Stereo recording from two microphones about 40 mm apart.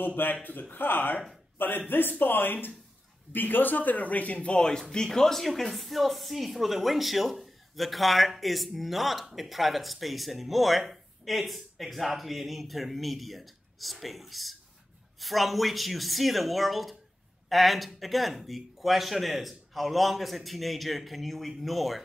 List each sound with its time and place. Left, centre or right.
0.0 s a man's voice: left
4.6 s a woman's voice: centre